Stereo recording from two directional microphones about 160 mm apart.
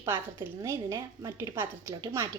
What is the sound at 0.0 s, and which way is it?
A woman's voice, 15° right (ahead or behind).